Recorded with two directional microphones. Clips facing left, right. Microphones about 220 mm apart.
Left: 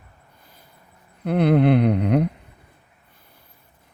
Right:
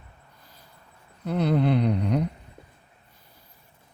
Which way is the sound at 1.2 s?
60° left (ahead or behind).